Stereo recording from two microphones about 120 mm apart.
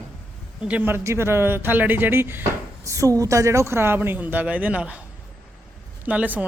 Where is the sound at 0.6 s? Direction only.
10° right (ahead or behind).